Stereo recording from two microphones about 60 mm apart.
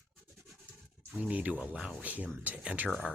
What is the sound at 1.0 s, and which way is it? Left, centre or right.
Speech, right.